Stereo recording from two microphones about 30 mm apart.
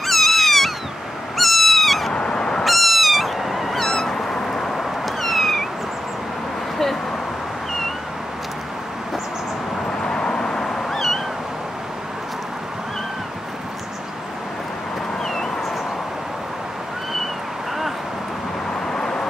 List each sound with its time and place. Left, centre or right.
0.0 s cat: centre
1.3 s owl: centre
2.2 s honk: left
2.6 s cat: centre
3.9 s cat: centre
10.0 s vehicle: left
18.9 s vehicle: left